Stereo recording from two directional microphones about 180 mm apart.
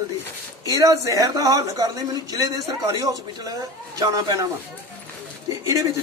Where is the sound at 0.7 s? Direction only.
20° right (ahead or behind).